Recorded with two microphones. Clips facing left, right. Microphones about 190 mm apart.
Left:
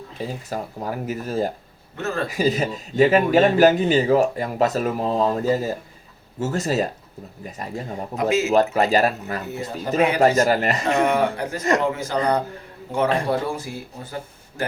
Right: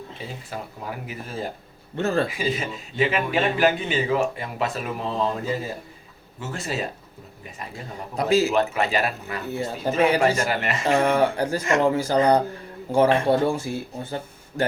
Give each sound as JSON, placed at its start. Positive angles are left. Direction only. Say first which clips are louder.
{"t": 0.2, "sound": "a man's voice", "louder": "left 8 dB", "side_deg": 40}
{"t": 2.0, "sound": "speech", "louder": "right 4 dB", "side_deg": -30}
{"t": 2.2, "sound": "a man's voice", "louder": "left 5 dB", "side_deg": 40}
{"t": 8.1, "sound": "speech", "louder": "right 1 dB", "side_deg": -35}
{"t": 8.5, "sound": "a man's voice", "louder": "left 5 dB", "side_deg": 40}
{"t": 9.5, "sound": "speech", "louder": "right 2 dB", "side_deg": -30}
{"t": 10.2, "sound": "a man's voice", "louder": "left 5 dB", "side_deg": 35}
{"t": 10.9, "sound": "speech", "louder": "right 2 dB", "side_deg": -35}